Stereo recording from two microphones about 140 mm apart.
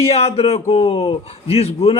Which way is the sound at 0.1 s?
45° left (ahead or behind).